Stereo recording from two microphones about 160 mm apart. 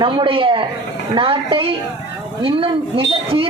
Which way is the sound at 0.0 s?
35° right (ahead or behind).